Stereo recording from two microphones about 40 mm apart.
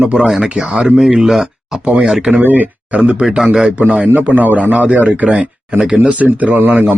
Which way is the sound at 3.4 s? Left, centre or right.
Centre.